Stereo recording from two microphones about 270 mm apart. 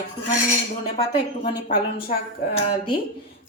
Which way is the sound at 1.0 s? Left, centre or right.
Centre.